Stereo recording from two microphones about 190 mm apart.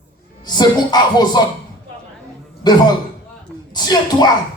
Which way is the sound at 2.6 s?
20° left (ahead or behind).